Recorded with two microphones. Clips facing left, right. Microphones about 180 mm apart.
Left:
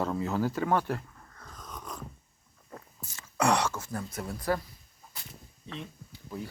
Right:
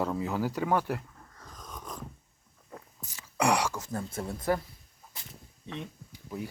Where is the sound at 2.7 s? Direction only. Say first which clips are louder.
Even; 15° right (ahead or behind).